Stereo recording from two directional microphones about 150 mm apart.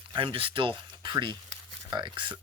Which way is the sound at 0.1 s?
35° right (ahead or behind).